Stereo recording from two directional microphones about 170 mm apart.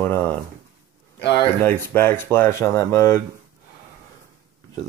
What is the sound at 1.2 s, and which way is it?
Speech, 85° left.